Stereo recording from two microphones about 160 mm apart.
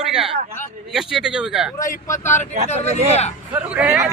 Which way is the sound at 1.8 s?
15° left (ahead or behind).